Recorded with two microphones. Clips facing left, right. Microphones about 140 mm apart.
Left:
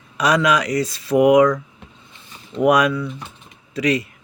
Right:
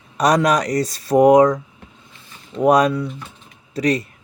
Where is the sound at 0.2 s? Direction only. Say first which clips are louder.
Right 2 dB; 40° right (ahead or behind).